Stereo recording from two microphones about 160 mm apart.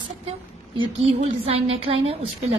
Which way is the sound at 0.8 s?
35° right (ahead or behind).